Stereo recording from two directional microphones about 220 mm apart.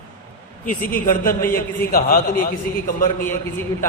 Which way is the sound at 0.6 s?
40° left (ahead or behind).